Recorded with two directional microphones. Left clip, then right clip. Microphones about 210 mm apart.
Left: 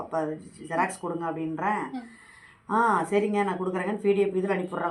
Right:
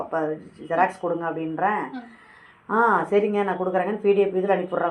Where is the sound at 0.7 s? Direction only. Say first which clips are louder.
Right 6 dB; 40° left (ahead or behind).